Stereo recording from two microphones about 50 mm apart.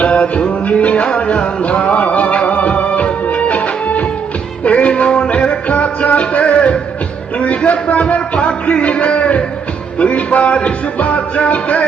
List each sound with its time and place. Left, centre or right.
0.0 s music: left
7.3 s a sound: left
10.0 s music: left